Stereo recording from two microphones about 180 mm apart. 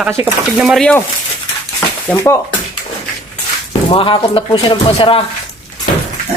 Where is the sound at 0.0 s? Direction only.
10° right (ahead or behind).